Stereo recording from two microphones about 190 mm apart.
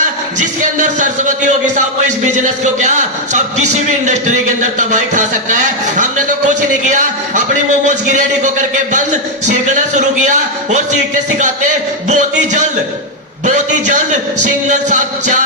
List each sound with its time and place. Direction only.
0.3 s a man's voice: 40° right (ahead or behind)